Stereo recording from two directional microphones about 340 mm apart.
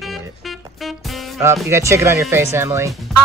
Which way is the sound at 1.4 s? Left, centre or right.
Centre.